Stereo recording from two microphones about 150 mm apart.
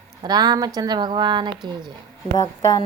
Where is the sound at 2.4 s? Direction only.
25° left (ahead or behind).